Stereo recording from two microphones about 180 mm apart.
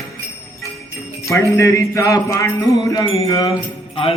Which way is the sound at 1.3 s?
15° left (ahead or behind).